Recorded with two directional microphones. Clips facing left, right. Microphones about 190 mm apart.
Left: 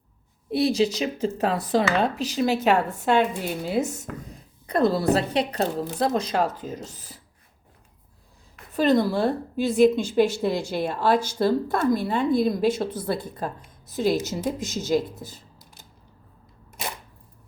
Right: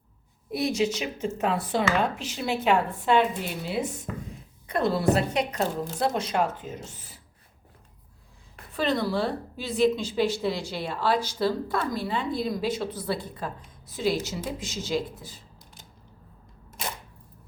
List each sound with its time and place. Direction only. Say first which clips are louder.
0.5 s a woman's voice: left 4 dB; 30° left (ahead or behind)
8.7 s a woman's voice: left 6 dB; 45° left (ahead or behind)